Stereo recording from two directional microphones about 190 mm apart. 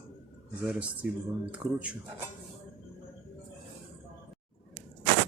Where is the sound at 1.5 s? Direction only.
5° right (ahead or behind).